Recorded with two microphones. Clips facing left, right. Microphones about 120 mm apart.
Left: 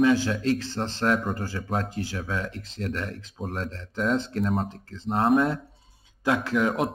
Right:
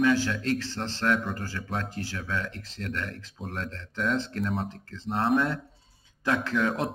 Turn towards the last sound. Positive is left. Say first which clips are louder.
# left 3 dB
turn(degrees=15)  # may be behind; listen again after turning